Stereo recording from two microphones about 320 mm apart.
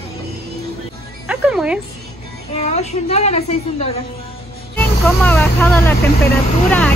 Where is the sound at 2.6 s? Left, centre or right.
Left.